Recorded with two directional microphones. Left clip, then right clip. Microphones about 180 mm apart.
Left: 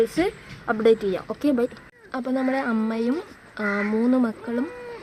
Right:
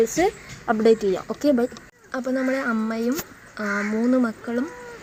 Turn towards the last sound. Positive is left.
turn(degrees=0)  # may be behind; listen again after turning